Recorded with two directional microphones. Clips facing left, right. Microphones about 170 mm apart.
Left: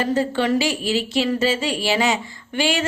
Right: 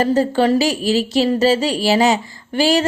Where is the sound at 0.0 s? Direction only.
40° right (ahead or behind).